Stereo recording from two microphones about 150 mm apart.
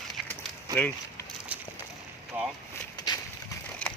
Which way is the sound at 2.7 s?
25° left (ahead or behind).